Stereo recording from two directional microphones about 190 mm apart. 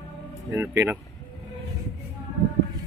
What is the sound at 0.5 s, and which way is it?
Speech, 10° right (ahead or behind).